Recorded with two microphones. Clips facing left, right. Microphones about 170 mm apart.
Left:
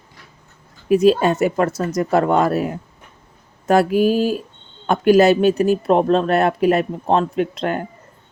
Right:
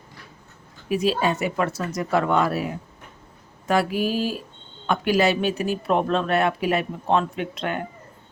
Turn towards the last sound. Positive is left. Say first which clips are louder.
# left 7 dB
turn(degrees=35)  # may be behind; listen again after turning